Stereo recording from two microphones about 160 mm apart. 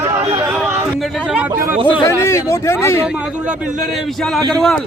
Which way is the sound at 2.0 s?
20° left (ahead or behind).